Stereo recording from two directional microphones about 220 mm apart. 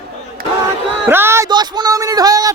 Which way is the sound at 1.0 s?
10° right (ahead or behind).